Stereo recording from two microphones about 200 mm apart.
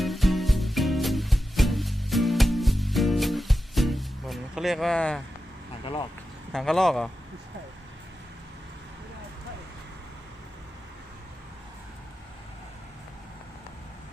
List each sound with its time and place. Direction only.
0.0 s music: centre (ahead or behind)
5.8 s speech: 25° left (ahead or behind)
6.5 s speech: centre (ahead or behind)